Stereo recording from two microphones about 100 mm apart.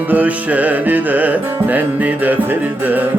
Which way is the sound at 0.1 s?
15° right (ahead or behind).